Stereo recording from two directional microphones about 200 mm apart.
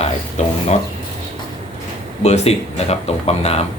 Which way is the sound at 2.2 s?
30° left (ahead or behind).